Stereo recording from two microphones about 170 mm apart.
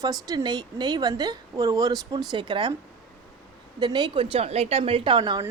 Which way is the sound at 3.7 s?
25° right (ahead or behind).